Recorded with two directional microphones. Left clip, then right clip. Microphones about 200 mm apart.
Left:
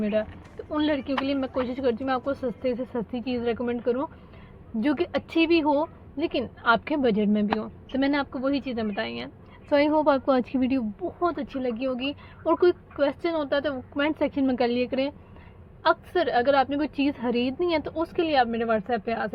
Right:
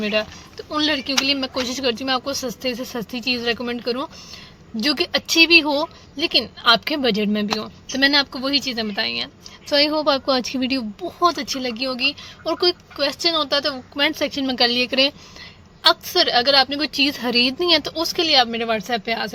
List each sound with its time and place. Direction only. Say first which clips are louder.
0.0 s a woman's voice: right 5 dB; 25° right (ahead or behind)